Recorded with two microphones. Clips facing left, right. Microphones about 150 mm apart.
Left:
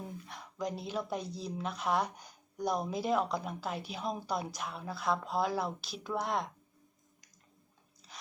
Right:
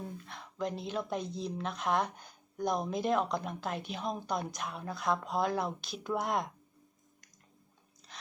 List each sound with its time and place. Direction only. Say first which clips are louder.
0.0 s speech: right 1 dB; 10° left (ahead or behind)
8.0 s rub: even; 5° left (ahead or behind)